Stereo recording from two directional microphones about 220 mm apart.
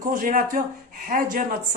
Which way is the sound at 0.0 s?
40° right (ahead or behind).